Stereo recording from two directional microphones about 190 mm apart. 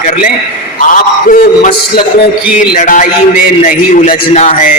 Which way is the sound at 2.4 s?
5° right (ahead or behind).